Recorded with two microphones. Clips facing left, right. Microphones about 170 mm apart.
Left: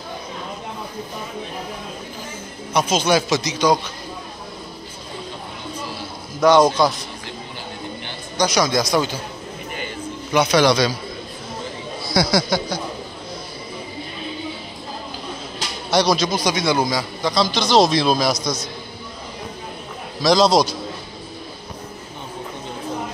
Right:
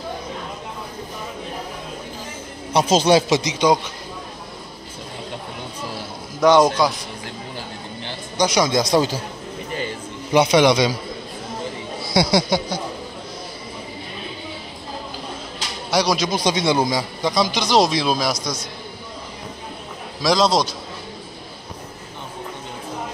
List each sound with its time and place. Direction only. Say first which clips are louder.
2.7 s a man's voice: right 3 dB; 35° right (ahead or behind)
6.8 s speech: left 1 dB; 10° right (ahead or behind)
8.4 s a man's voice: right 1 dB; 20° right (ahead or behind)
8.9 s a man's voice: right 2 dB; 35° right (ahead or behind)
10.3 s a man's voice: right 1 dB; 25° right (ahead or behind)
12.1 s speech: right 1 dB; 20° right (ahead or behind)
15.9 s speech: left 2 dB; 10° right (ahead or behind)
16.3 s speech: right 1 dB; 25° right (ahead or behind); by 18.6 s 10° right (ahead or behind)
20.2 s a man's voice: left 3 dB; centre (ahead or behind)